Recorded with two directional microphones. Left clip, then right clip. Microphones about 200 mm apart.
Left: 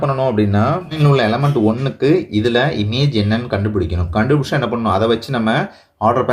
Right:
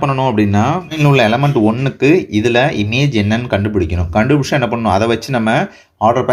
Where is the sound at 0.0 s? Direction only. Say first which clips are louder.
Right 2 dB; 35° right (ahead or behind).